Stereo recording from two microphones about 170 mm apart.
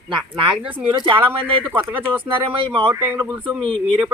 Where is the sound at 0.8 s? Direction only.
30° right (ahead or behind).